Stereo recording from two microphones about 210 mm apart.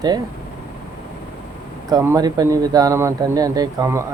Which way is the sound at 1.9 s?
15° right (ahead or behind).